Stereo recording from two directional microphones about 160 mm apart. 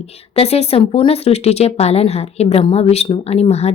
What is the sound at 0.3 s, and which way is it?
A woman's voice, 40° left (ahead or behind).